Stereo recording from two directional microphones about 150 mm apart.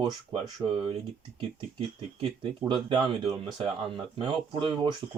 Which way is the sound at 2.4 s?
35° right (ahead or behind).